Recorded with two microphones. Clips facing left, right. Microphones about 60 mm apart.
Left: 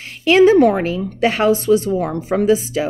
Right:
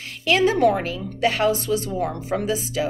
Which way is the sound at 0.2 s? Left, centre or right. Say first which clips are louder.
Left 7 dB; left.